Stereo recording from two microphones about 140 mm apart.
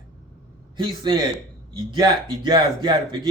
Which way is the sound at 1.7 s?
35° right (ahead or behind).